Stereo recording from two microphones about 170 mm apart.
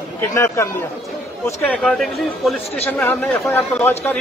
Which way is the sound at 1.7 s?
5° left (ahead or behind).